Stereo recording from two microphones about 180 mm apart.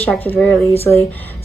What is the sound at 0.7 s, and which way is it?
Speech, 35° left (ahead or behind).